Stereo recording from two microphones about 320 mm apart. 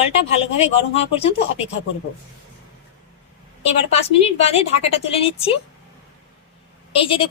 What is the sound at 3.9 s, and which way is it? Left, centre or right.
A woman's voice, centre.